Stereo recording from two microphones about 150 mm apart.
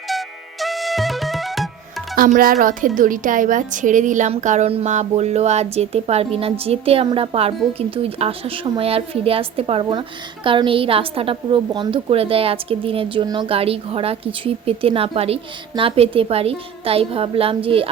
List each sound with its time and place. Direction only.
0.1 s music: centre (ahead or behind)
2.1 s speech: 70° right (ahead or behind); by 17.8 s 35° right (ahead or behind)